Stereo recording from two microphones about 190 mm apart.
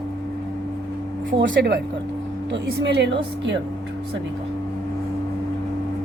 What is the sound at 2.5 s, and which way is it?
A woman's voice, 65° right (ahead or behind).